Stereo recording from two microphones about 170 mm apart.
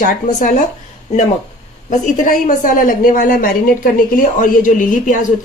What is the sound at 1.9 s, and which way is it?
A woman's voice, 50° left (ahead or behind).